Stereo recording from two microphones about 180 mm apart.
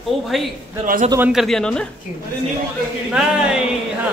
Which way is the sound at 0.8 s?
50° right (ahead or behind).